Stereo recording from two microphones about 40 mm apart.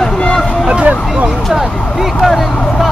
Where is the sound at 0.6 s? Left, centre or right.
Right.